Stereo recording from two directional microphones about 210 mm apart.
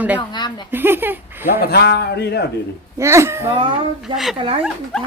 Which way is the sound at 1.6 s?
50° left (ahead or behind).